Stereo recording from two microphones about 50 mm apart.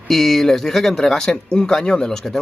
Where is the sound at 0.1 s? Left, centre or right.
Centre.